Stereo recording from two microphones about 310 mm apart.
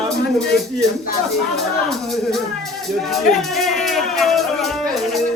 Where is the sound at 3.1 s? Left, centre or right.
Centre.